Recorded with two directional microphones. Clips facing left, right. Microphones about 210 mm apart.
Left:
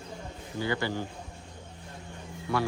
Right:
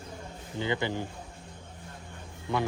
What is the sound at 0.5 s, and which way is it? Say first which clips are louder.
Speech: even; 20° right (ahead or behind).